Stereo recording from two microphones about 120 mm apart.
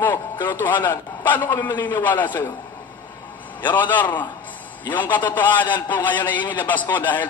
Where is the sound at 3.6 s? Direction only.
15° left (ahead or behind).